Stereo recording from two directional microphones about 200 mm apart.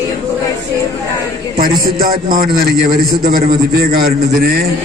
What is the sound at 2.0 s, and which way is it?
A man's voice, 45° right (ahead or behind).